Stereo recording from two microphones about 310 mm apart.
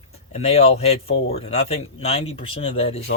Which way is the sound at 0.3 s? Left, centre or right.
Centre.